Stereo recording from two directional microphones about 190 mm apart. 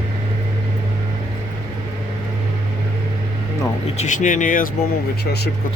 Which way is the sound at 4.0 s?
40° left (ahead or behind).